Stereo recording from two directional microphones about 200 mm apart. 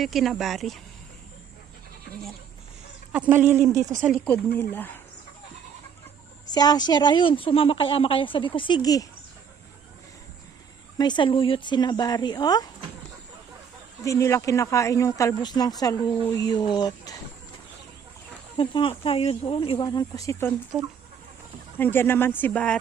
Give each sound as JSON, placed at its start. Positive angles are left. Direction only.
{"t": 0.0, "sound": "speech", "side_deg": 0}
{"t": 3.1, "sound": "speech", "side_deg": -5}
{"t": 4.1, "sound": "speech", "side_deg": 5}
{"t": 6.5, "sound": "speech", "side_deg": 20}
{"t": 10.9, "sound": "speech", "side_deg": 20}
{"t": 14.0, "sound": "speech", "side_deg": 15}
{"t": 18.5, "sound": "speech", "side_deg": 25}
{"t": 21.8, "sound": "speech", "side_deg": 10}